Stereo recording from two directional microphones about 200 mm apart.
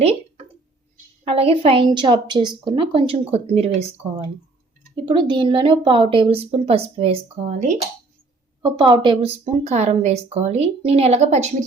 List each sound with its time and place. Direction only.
1.2 s a woman's voice: 30° right (ahead or behind)
5.0 s a woman's voice: 25° right (ahead or behind)
8.6 s speech: 20° right (ahead or behind)